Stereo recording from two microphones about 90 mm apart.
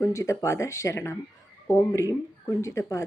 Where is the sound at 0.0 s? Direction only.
35° left (ahead or behind).